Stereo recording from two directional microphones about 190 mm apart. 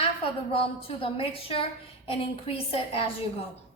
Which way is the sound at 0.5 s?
30° left (ahead or behind).